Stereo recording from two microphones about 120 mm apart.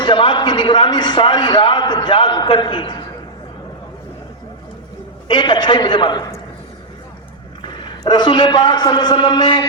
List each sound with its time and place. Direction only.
0.0 s a man's voice: 45° left (ahead or behind)
5.3 s a man's voice: 40° left (ahead or behind)
7.6 s a man's voice: 40° left (ahead or behind)